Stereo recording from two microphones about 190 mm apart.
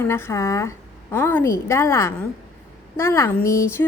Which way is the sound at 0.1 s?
15° left (ahead or behind).